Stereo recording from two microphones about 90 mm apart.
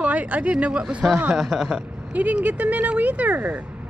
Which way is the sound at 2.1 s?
15° right (ahead or behind).